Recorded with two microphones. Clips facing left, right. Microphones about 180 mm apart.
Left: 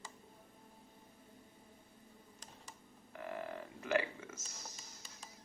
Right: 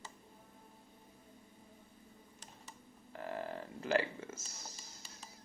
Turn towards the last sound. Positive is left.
turn(degrees=-30)  # may be behind; listen again after turning